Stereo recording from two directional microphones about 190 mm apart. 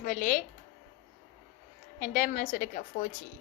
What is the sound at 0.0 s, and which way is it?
Speech, 45° left (ahead or behind).